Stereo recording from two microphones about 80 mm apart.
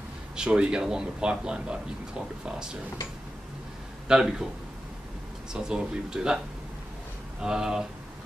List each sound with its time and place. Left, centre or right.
0.4 s speech: centre
4.1 s speech: centre
5.5 s speech: centre
7.4 s speech: centre